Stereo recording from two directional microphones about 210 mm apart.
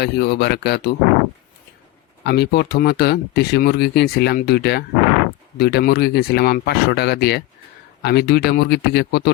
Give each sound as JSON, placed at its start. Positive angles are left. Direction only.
{"t": 0.0, "sound": "speech", "side_deg": 50}
{"t": 2.2, "sound": "speech", "side_deg": 50}